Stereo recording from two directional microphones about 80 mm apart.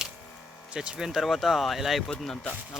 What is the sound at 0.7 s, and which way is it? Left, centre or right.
Speech, centre.